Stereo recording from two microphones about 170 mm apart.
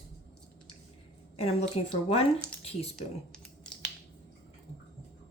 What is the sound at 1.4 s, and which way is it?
Speech, 35° left (ahead or behind).